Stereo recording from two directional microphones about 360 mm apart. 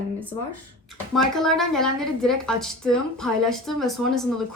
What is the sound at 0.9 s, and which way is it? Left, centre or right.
A woman's voice, centre.